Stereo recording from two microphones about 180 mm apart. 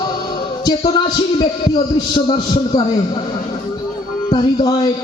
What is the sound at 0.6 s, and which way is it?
A man's voice, 25° left (ahead or behind).